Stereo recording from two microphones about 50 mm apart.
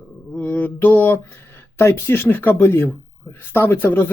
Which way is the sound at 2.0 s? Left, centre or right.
Left.